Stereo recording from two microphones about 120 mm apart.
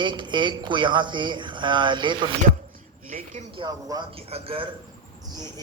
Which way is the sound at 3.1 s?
90° right.